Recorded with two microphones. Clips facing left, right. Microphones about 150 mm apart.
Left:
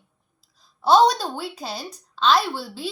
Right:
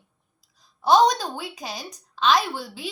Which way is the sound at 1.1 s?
15° right (ahead or behind).